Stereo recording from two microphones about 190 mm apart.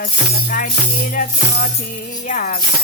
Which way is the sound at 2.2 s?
40° left (ahead or behind).